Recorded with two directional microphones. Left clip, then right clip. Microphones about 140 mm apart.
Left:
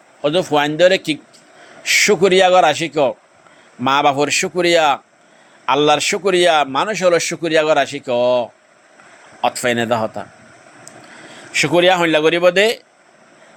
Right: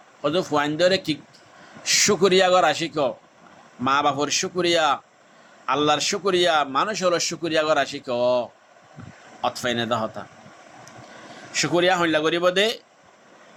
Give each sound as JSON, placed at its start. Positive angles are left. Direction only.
{"t": 0.2, "sound": "a man's voice", "side_deg": 25}
{"t": 11.5, "sound": "a man's voice", "side_deg": 35}